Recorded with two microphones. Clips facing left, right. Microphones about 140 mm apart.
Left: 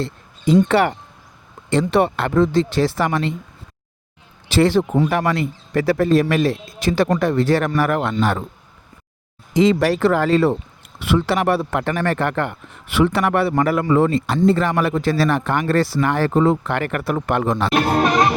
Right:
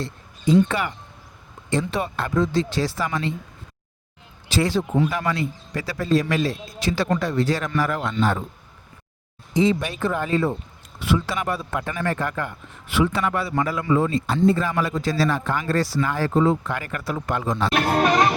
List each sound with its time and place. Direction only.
0.5 s speech: 70° left (ahead or behind)
4.5 s speech: 65° left (ahead or behind)
8.2 s speech: 70° left (ahead or behind)
9.6 s speech: 90° left
11.0 s speech: 70° left (ahead or behind)
17.8 s music: 20° left (ahead or behind)